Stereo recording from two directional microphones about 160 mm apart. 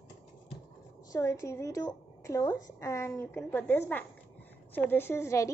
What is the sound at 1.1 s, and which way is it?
A woman's voice, 20° left (ahead or behind).